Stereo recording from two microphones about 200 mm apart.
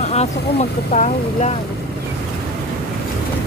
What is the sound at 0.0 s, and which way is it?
Speech, 35° left (ahead or behind).